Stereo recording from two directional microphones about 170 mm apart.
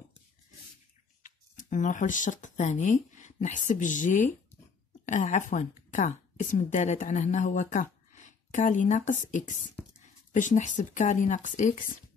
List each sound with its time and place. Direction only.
1.2 s a woman's voice: 50° left (ahead or behind)
9.8 s a sound: 10° left (ahead or behind)
10.3 s speech: 45° left (ahead or behind)